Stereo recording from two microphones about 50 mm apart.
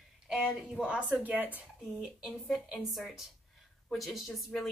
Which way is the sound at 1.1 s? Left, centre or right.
Right.